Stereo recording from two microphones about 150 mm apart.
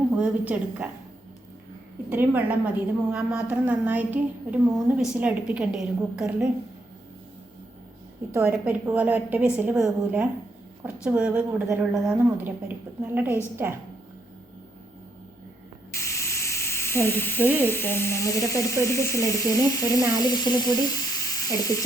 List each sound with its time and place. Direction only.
0.2 s a woman's voice: 10° right (ahead or behind)
2.0 s a woman's voice: 15° right (ahead or behind)
8.3 s a woman's voice: 15° right (ahead or behind)
15.9 s speech: 20° left (ahead or behind)